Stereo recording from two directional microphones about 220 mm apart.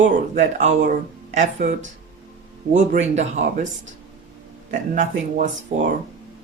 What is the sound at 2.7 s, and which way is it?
Speech, 35° right (ahead or behind).